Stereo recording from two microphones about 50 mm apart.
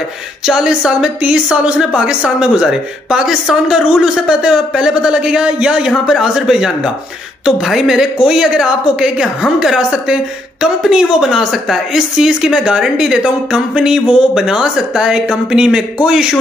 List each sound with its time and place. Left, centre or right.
0.5 s a woman's voice: centre
5.9 s a woman's voice: centre